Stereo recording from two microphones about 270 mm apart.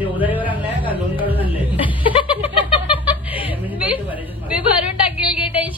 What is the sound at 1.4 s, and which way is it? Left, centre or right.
Chuckle, centre.